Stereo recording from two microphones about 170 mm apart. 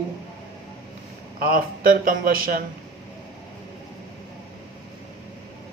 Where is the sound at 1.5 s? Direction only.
60° right (ahead or behind).